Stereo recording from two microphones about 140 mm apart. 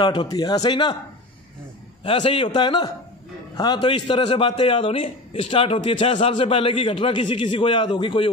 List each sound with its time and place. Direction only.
0.0 s a man's voice: 35° left (ahead or behind)
2.0 s a man's voice: 40° left (ahead or behind)